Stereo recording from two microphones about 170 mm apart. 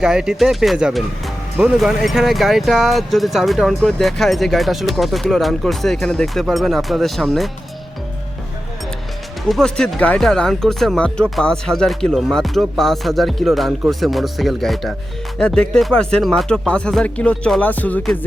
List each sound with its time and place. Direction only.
0.0 s speech: 5° right (ahead or behind)
9.5 s speech: 5° left (ahead or behind)